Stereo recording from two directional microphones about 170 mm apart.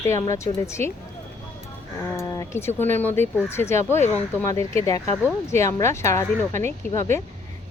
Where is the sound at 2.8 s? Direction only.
10° left (ahead or behind).